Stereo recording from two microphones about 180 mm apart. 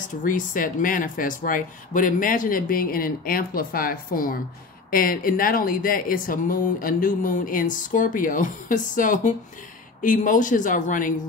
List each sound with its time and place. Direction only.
0.0 s speech: 45° left (ahead or behind)